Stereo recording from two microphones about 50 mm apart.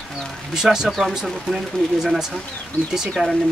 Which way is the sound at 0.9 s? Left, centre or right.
Centre.